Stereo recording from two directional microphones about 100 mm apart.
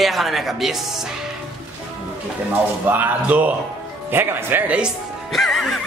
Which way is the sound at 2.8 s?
20° right (ahead or behind).